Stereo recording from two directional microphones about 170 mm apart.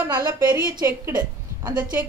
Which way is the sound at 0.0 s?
20° right (ahead or behind).